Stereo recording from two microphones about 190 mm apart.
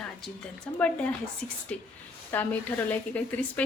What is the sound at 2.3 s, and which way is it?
A woman's voice, 10° left (ahead or behind).